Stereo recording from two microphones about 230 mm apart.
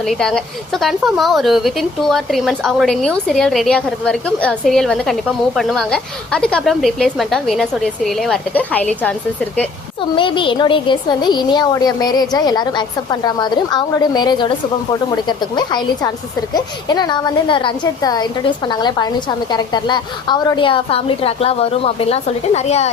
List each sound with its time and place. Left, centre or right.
0.0 s a woman's voice: centre
10.2 s a woman's voice: left